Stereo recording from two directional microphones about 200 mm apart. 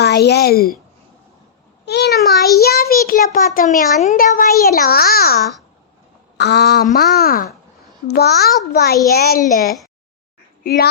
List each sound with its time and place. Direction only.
0.0 s a woman's voice: 55° left (ahead or behind)
1.8 s a child's voice: 55° left (ahead or behind)